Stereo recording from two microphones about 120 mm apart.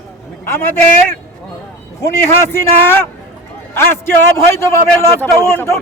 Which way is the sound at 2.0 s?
20° left (ahead or behind).